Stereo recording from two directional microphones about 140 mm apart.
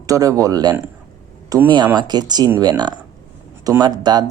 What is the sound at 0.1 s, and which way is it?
Speech, 25° right (ahead or behind).